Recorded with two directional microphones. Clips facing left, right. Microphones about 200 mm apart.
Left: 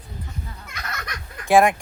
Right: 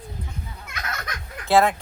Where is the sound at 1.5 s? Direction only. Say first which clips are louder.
Left 2 dB; 15° left (ahead or behind).